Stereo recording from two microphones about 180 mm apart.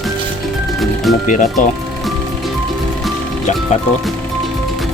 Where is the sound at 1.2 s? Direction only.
45° left (ahead or behind).